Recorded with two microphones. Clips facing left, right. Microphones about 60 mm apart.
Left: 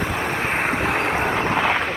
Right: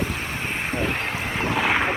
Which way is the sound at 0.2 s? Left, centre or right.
Left.